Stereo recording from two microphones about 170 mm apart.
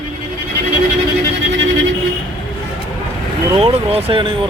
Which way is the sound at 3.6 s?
35° right (ahead or behind).